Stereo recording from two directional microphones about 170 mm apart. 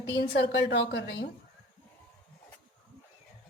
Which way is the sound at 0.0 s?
85° left.